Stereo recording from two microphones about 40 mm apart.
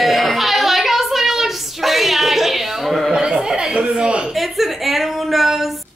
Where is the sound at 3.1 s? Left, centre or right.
Right.